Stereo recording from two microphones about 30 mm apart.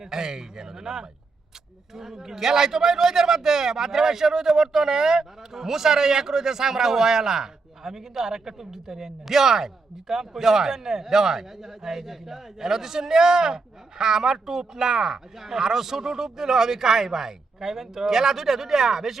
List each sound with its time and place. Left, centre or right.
0.0 s a man's voice: centre